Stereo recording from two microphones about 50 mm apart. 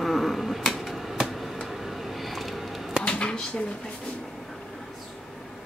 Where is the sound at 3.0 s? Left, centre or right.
Left.